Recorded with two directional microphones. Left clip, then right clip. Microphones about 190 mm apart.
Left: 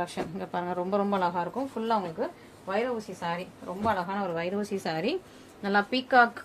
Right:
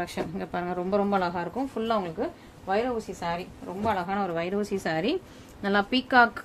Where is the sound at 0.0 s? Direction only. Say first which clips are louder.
Right 1 dB; 30° right (ahead or behind).